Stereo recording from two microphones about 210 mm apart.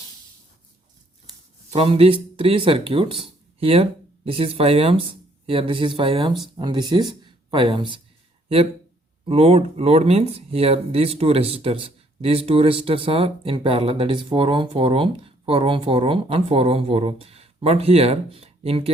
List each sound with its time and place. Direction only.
1.7 s speech: 25° right (ahead or behind)
9.2 s speech: 25° right (ahead or behind)